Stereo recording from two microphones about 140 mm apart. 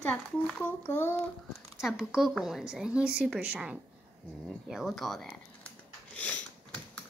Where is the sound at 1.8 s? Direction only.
5° right (ahead or behind).